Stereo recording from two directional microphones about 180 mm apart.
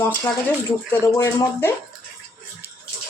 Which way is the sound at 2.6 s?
10° right (ahead or behind).